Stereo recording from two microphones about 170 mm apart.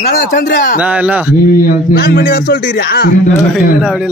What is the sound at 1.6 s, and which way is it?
A man's voice, 60° left (ahead or behind).